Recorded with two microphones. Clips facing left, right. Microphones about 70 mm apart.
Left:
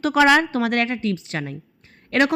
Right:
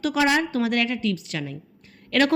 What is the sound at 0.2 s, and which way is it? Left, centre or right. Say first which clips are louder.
Speech: left 6 dB; left.